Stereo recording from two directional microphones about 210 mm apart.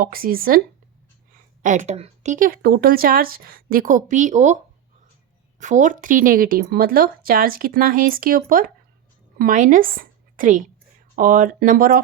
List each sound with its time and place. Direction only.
0.0 s speech: 45° right (ahead or behind)
1.6 s speech: 35° right (ahead or behind)
5.5 s speech: 35° right (ahead or behind)